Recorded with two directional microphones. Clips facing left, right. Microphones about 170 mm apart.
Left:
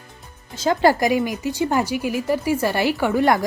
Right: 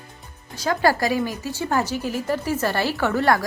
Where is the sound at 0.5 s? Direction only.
25° left (ahead or behind).